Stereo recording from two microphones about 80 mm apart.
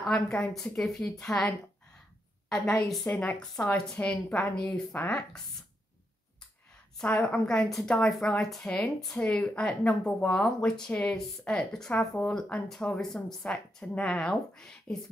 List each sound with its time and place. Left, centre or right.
0.0 s a woman's voice: centre
3.1 s speech: centre
7.0 s a woman's voice: centre
9.2 s speech: centre